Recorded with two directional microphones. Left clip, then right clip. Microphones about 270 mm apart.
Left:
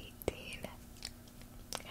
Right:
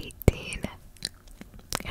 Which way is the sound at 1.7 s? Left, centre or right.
Right.